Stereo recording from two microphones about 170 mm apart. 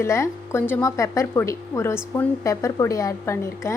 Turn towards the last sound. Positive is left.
turn(degrees=15)  # may be behind; listen again after turning